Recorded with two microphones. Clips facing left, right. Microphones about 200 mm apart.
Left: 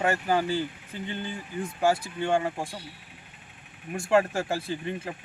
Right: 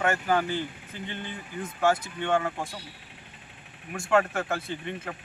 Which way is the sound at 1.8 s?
30° left (ahead or behind).